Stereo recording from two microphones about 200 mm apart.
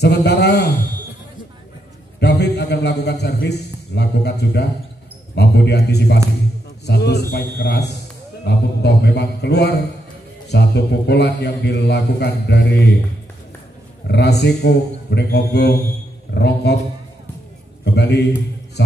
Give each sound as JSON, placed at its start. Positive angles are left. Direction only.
{"t": 0.0, "sound": "a sound", "side_deg": 55}
{"t": 2.1, "sound": "a man's voice", "side_deg": 55}
{"t": 14.0, "sound": "a man's voice", "side_deg": 55}
{"t": 17.8, "sound": "a man's voice", "side_deg": 55}